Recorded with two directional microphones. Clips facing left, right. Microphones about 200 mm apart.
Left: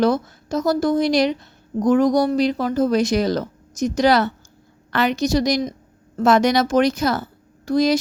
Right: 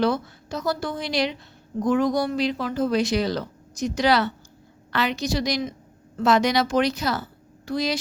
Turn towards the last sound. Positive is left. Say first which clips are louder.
# left 8 dB
turn(degrees=45)  # may be behind; listen again after turning